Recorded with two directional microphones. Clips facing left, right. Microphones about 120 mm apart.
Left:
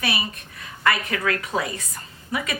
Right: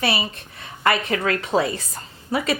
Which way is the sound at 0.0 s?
30° right (ahead or behind).